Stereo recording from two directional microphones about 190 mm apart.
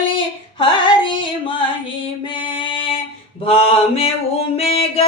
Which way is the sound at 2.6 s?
25° left (ahead or behind).